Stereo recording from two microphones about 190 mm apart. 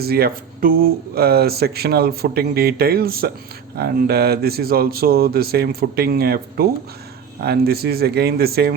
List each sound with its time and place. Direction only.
0.0 s speech: 55° right (ahead or behind)